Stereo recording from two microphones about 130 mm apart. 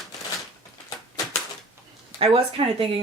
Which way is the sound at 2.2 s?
45° right (ahead or behind).